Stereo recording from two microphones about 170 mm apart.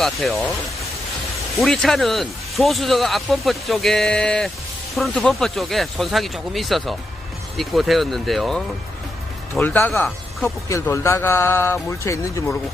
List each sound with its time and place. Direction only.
0.0 s speech: centre (ahead or behind)
1.5 s a man's voice: centre (ahead or behind)
10.7 s a man's voice: 15° left (ahead or behind)